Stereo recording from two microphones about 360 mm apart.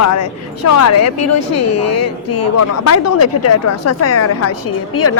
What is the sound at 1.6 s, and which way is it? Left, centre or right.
Speech, left.